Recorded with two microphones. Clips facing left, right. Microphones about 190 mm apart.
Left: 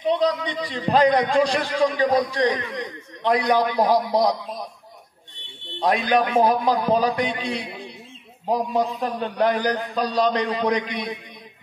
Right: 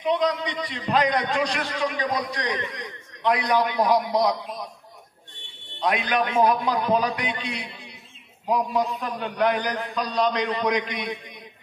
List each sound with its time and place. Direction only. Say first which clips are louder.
0.0 s a man's voice: left 2 dB; 35° left (ahead or behind)
5.8 s a man's voice: left 4 dB; 35° left (ahead or behind)